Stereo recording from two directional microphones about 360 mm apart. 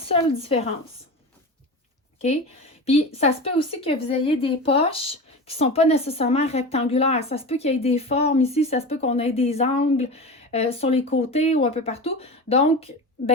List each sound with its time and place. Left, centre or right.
0.1 s speech: centre
2.8 s speech: centre